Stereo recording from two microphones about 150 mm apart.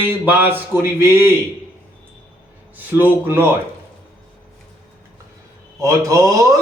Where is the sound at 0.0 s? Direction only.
10° right (ahead or behind).